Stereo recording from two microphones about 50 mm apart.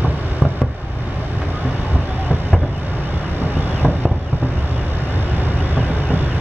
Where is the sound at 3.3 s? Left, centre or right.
Right.